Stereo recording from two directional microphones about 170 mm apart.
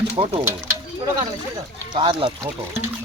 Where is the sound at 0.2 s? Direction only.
30° right (ahead or behind).